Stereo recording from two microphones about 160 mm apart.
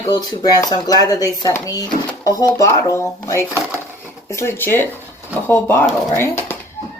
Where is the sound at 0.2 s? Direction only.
25° left (ahead or behind).